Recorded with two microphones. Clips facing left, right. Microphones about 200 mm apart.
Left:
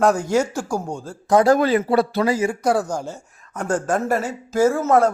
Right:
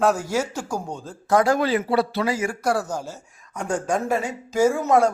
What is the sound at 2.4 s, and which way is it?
Speech, 20° left (ahead or behind).